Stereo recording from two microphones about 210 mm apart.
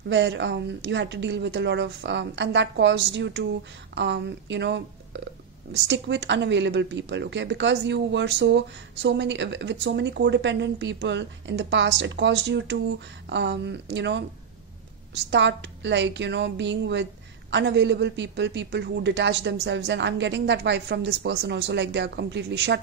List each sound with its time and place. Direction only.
0.1 s speech: 55° right (ahead or behind)
15.3 s speech: 55° right (ahead or behind)